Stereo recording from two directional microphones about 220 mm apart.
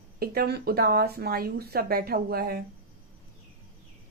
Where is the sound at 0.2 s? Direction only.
45° right (ahead or behind).